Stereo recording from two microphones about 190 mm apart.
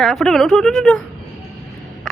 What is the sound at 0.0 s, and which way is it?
Speech, centre (ahead or behind).